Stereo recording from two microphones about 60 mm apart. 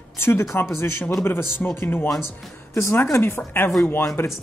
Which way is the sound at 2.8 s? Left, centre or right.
Left.